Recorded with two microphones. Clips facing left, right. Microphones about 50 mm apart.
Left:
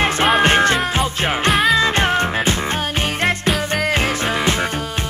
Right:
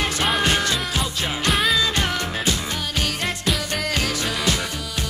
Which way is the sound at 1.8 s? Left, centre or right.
Left.